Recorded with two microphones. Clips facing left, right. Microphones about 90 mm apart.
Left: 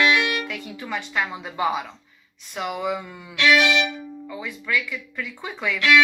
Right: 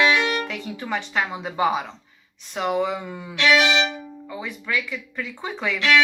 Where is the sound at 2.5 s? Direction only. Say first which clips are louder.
Right 3 dB; 35° right (ahead or behind).